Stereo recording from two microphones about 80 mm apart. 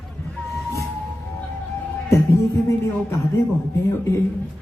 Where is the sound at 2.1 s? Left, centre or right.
Left.